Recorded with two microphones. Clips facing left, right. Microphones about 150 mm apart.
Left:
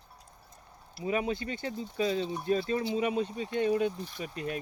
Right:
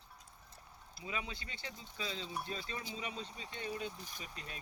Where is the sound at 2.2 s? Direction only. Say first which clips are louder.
Left 8 dB; 25° left (ahead or behind).